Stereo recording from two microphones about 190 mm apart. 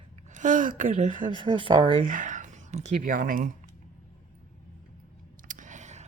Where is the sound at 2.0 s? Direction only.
45° right (ahead or behind).